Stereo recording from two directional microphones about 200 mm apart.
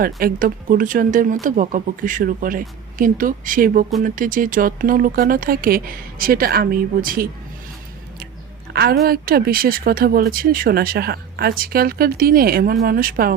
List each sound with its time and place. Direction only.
0.2 s speech: 45° right (ahead or behind)
8.7 s speech: 50° right (ahead or behind)